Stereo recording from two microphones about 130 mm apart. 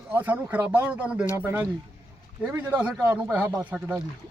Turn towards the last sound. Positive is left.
turn(degrees=-10)  # may be behind; listen again after turning